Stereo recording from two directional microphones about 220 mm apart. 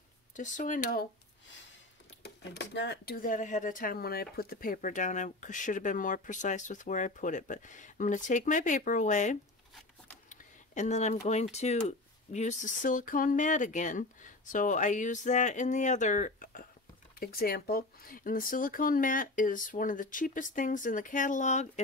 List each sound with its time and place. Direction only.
0.4 s speech: 35° left (ahead or behind)
2.2 s speech: 50° left (ahead or behind); by 9.4 s 35° left (ahead or behind)
10.3 s a sound: 35° left (ahead or behind)
11.5 s speech: 30° left (ahead or behind)